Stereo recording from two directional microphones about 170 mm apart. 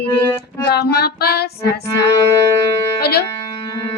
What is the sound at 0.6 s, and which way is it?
Child singing, 70° left (ahead or behind).